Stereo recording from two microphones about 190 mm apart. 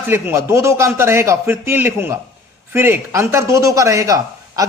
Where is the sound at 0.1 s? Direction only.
15° right (ahead or behind).